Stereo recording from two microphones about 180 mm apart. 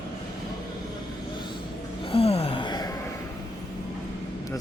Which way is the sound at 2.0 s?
30° left (ahead or behind).